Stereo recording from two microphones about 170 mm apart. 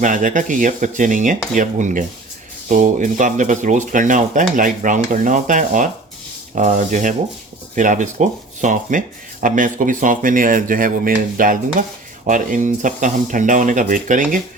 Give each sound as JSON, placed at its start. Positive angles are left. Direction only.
{"t": 0.0, "sound": "speech", "side_deg": -50}